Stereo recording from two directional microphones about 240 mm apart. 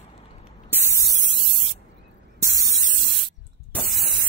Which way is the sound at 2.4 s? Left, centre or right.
Centre.